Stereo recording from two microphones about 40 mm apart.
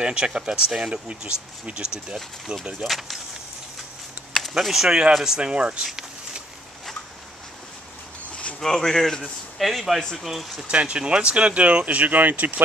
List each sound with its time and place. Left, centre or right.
0.0 s speech: right
2.9 s speech: centre
4.6 s speech: centre
4.8 s speech: centre
5.4 s speech: right
8.3 s a sound: left
8.5 s speech: centre
9.6 s speech: centre
10.7 s speech: right